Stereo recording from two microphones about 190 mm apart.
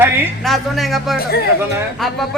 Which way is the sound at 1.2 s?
55° left (ahead or behind).